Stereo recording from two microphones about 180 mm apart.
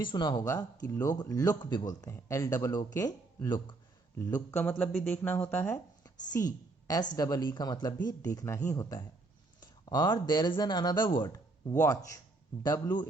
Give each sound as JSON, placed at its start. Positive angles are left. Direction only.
{"t": 0.1, "sound": "a man's voice", "side_deg": 25}
{"t": 4.5, "sound": "speech", "side_deg": 10}
{"t": 6.4, "sound": "a sound", "side_deg": 20}
{"t": 7.2, "sound": "a man's voice", "side_deg": 20}